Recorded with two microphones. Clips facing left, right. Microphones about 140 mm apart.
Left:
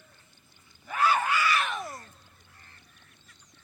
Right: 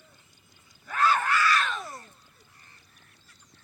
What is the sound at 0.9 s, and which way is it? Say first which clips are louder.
Screaming: right 1 dB; 10° left (ahead or behind).